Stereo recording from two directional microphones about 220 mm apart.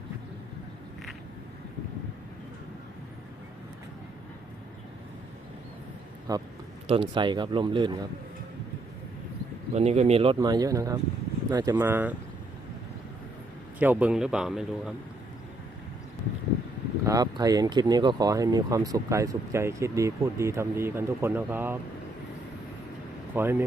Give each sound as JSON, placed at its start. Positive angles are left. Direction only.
{"t": 6.3, "sound": "speech", "side_deg": -15}
{"t": 9.7, "sound": "speech", "side_deg": -30}
{"t": 13.7, "sound": "a man's voice", "side_deg": -5}
{"t": 17.1, "sound": "speech", "side_deg": -15}
{"t": 23.3, "sound": "speech", "side_deg": -10}